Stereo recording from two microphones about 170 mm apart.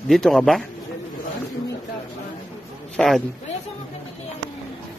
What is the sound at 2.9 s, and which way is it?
Speech, centre (ahead or behind).